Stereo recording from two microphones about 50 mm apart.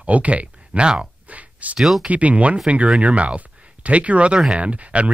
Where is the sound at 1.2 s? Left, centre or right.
Right.